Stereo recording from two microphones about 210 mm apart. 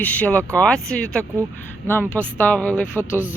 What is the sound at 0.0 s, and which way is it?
Speech, 5° left (ahead or behind).